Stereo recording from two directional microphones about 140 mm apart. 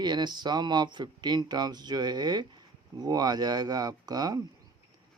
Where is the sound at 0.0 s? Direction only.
30° right (ahead or behind).